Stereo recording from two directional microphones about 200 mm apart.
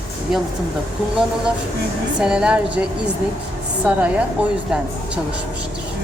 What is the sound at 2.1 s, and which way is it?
Speech, 5° right (ahead or behind).